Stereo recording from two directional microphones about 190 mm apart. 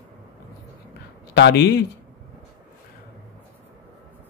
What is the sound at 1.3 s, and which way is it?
Speech, 65° left (ahead or behind).